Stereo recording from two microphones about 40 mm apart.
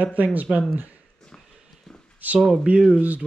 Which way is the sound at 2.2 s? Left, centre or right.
Right.